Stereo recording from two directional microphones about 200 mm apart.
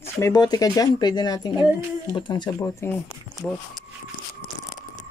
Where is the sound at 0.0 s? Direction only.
15° left (ahead or behind).